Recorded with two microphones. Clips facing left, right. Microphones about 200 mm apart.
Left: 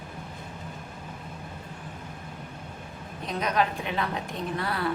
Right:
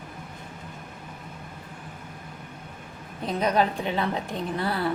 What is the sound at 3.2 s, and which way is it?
Speech, 30° right (ahead or behind).